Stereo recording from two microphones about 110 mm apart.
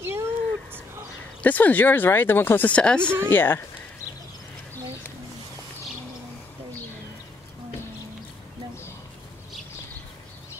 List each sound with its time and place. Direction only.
0.0 s a sound: 20° right (ahead or behind)
1.4 s speech: 15° left (ahead or behind)
3.3 s speech: 20° left (ahead or behind)